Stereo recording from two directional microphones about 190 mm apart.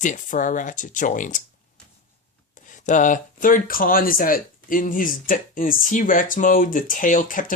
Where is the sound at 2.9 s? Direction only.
40° left (ahead or behind).